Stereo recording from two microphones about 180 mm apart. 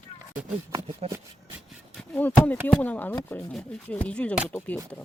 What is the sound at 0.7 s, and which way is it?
Speech, 35° right (ahead or behind).